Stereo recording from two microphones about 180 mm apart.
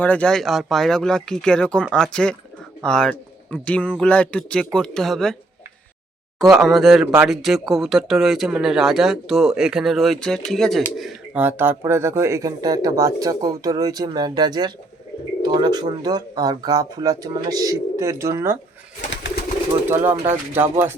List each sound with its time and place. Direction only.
0.0 s speech: 5° left (ahead or behind)
6.5 s speech: centre (ahead or behind); by 18.5 s 15° right (ahead or behind)
19.1 s pigeon: 90° left
19.9 s speech: 10° right (ahead or behind)